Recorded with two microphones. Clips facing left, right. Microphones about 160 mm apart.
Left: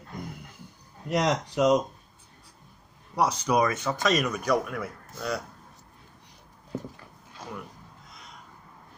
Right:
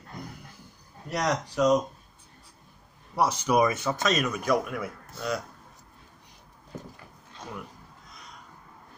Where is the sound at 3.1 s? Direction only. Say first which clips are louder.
Even; 5° right (ahead or behind).